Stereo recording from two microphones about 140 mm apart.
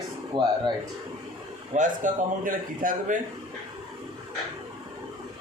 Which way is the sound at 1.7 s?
65° right (ahead or behind).